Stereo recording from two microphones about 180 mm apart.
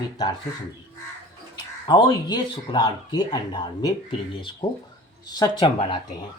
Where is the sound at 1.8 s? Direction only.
25° left (ahead or behind).